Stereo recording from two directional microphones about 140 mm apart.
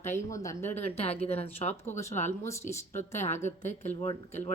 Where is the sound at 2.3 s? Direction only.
20° left (ahead or behind).